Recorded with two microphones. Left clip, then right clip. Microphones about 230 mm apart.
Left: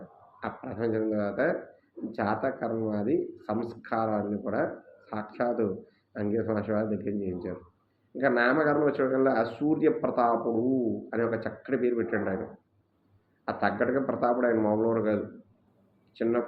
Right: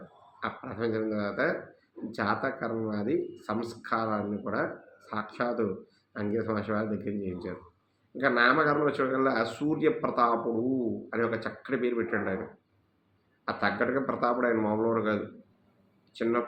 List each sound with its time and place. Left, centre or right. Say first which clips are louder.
0.3 s a sound: even; centre
1.1 s speech: left 2 dB; centre
13.4 s speech: left 1 dB; centre